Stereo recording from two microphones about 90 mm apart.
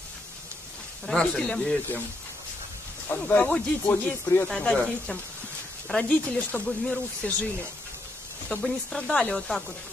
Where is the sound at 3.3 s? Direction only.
15° left (ahead or behind).